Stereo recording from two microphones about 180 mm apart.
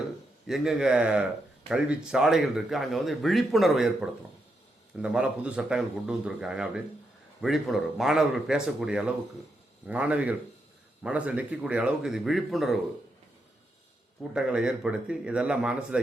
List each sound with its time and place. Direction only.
0.4 s speech: centre (ahead or behind)
4.9 s a man's voice: 5° right (ahead or behind)
14.3 s speech: 5° right (ahead or behind)